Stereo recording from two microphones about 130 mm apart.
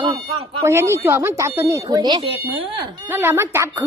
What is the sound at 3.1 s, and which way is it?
Speech, 15° right (ahead or behind).